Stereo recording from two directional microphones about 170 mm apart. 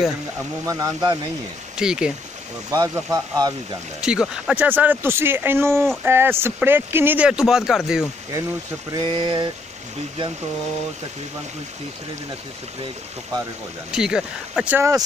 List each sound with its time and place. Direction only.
0.7 s speech: 20° right (ahead or behind)
1.8 s speech: 5° right (ahead or behind)
2.7 s speech: 20° right (ahead or behind)
4.0 s speech: 5° right (ahead or behind)
8.9 s speech: 25° right (ahead or behind)
13.9 s speech: 5° right (ahead or behind)